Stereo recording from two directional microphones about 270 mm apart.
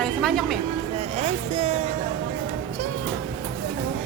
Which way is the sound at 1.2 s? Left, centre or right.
Right.